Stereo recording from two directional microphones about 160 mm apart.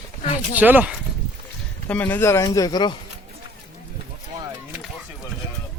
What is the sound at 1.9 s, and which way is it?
Speech, 10° left (ahead or behind).